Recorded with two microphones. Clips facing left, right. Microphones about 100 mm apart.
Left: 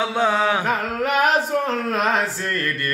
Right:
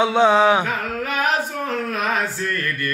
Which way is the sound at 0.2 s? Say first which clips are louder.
Right 5 dB; 20° right (ahead or behind).